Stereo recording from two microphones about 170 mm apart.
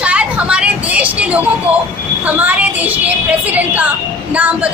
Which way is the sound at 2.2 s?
10° right (ahead or behind).